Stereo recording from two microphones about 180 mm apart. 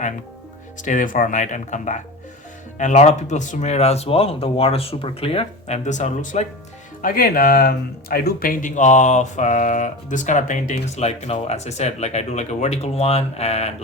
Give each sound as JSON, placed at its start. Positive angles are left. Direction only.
{"t": 0.8, "sound": "speech", "side_deg": 45}